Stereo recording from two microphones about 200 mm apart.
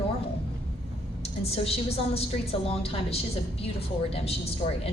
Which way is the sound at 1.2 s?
30° left (ahead or behind).